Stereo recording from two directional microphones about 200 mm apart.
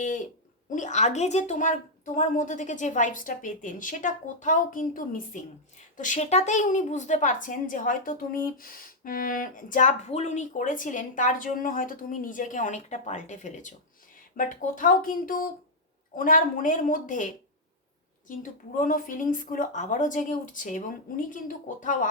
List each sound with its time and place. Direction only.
0.0 s a woman's voice: 40° left (ahead or behind)
18.8 s a woman's voice: 45° left (ahead or behind)